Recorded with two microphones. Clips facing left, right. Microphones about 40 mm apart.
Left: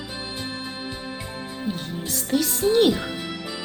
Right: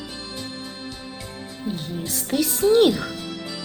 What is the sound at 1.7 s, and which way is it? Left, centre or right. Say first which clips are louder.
Music: right 1 dB; centre.